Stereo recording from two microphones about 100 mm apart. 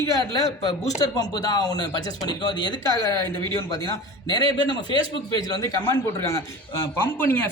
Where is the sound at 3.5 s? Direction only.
40° left (ahead or behind).